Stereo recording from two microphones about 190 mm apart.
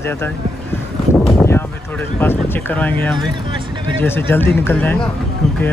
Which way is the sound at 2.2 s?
10° left (ahead or behind).